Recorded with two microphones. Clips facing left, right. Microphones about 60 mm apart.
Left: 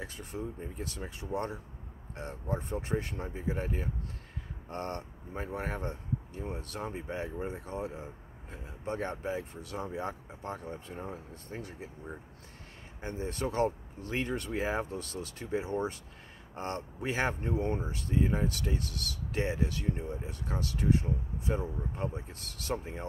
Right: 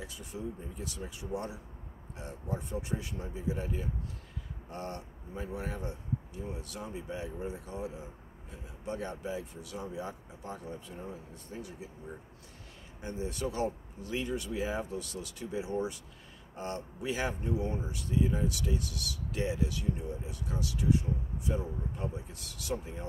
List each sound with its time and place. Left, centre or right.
0.0 s speech: left
13.0 s speech: left